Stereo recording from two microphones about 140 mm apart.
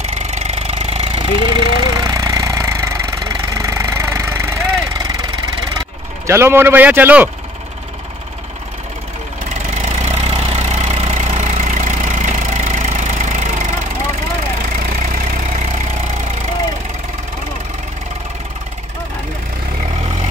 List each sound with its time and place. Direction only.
0.4 s a sound: 50° right (ahead or behind); by 2.9 s 20° right (ahead or behind)
3.5 s vehicle: 20° right (ahead or behind)
6.2 s a man's voice: 20° right (ahead or behind)
9.8 s vehicle: 50° right (ahead or behind)
14.9 s vehicle: 65° right (ahead or behind)